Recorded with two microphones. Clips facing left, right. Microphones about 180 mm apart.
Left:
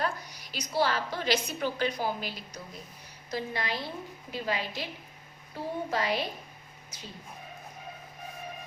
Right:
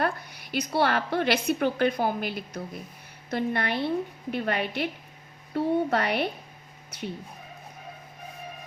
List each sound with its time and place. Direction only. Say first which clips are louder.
0.0 s a woman's voice: right 4 dB; 55° right (ahead or behind)